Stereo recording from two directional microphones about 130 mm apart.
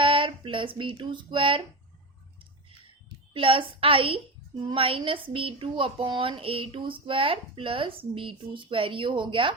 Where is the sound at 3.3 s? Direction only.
40° right (ahead or behind).